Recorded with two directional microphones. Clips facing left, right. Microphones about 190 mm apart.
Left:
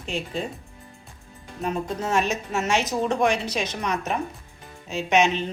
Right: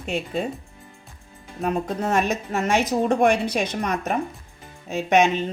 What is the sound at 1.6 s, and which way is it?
A woman's voice, 55° right (ahead or behind).